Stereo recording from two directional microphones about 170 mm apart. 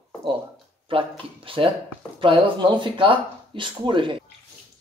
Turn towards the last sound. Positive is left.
turn(degrees=-30)  # may be behind; listen again after turning